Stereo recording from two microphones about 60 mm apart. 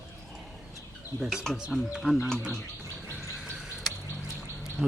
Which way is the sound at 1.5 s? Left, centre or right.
Centre.